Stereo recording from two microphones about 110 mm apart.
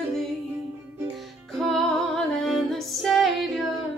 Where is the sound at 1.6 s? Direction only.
5° left (ahead or behind).